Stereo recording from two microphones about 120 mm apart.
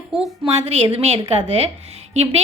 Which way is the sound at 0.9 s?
65° right (ahead or behind).